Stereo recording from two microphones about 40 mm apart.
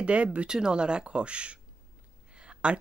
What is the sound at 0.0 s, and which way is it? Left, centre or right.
Speech, right.